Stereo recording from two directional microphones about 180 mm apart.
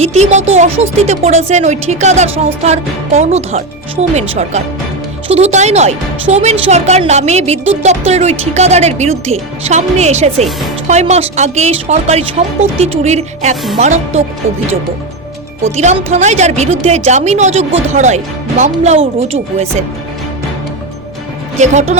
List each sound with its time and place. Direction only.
0.0 s speech: 40° right (ahead or behind)
15.6 s speech: 40° right (ahead or behind)
21.6 s speech: 40° right (ahead or behind)